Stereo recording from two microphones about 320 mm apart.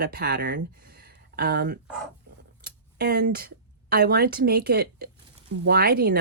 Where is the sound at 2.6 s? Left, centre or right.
Right.